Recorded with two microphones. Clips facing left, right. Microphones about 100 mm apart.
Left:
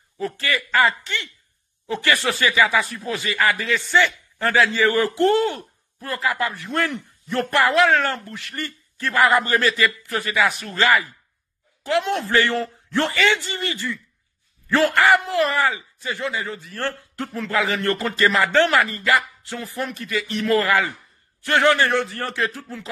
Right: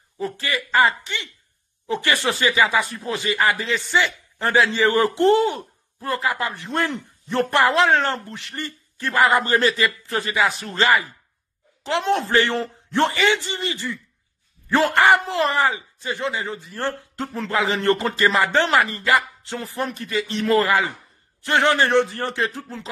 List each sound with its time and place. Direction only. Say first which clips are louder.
0.2 s a woman's voice: left 1 dB; 20° right (ahead or behind)
12.1 s speech: right 3 dB; 35° right (ahead or behind)
12.4 s speech: even; 25° right (ahead or behind)